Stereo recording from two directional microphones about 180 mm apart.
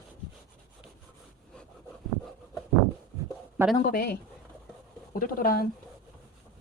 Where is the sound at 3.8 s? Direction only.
55° left (ahead or behind).